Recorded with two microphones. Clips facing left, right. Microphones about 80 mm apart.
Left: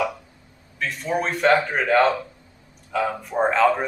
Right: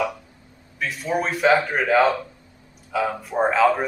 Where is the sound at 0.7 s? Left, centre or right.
Centre.